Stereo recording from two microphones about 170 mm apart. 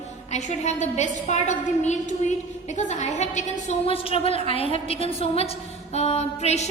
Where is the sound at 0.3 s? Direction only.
40° left (ahead or behind).